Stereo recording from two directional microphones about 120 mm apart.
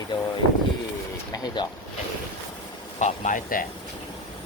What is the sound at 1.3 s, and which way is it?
Speech, 35° left (ahead or behind).